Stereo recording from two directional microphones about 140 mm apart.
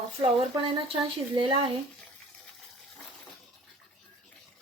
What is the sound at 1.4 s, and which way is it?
Speech, 35° right (ahead or behind).